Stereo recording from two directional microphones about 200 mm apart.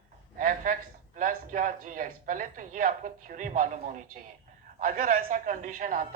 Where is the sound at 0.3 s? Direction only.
40° right (ahead or behind).